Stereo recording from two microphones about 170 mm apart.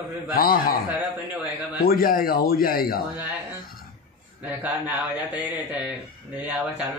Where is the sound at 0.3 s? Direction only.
60° left (ahead or behind).